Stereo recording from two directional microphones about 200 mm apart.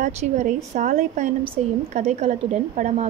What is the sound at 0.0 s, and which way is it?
Speech, 40° right (ahead or behind).